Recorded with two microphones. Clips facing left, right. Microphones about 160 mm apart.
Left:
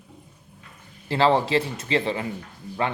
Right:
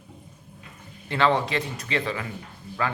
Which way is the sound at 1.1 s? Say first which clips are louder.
Left 3 dB; 30° left (ahead or behind).